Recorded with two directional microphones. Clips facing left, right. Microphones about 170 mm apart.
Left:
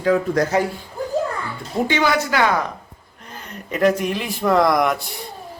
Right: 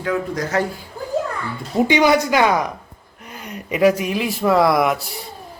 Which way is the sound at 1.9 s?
15° right (ahead or behind).